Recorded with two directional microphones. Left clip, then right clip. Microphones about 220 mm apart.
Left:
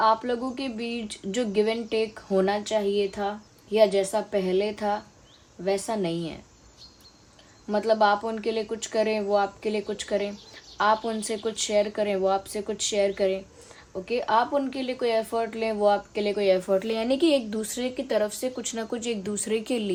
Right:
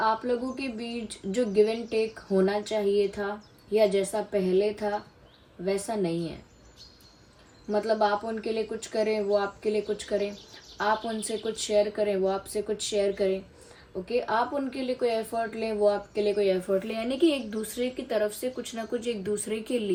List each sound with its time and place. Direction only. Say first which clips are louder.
0.0 s speech: left 3 dB; 25° left (ahead or behind)
0.8 s speech: left 3 dB; centre (ahead or behind)
1.4 s speech: right 1 dB; 25° left (ahead or behind)
7.7 s a woman's voice: left 3 dB; 25° left (ahead or behind)